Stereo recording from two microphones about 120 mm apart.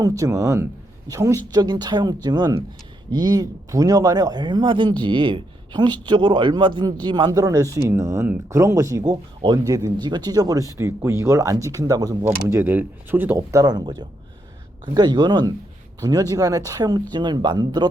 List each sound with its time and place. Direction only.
0.0 s speech: 25° right (ahead or behind)
12.2 s speech: 20° right (ahead or behind)